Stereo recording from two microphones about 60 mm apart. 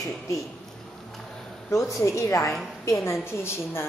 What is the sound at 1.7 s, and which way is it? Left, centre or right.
Speech, left.